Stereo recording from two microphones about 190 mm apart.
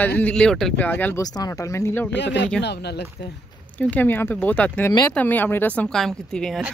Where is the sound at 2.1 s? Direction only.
65° left (ahead or behind).